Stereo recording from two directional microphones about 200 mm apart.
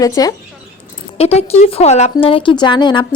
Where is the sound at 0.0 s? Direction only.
20° left (ahead or behind).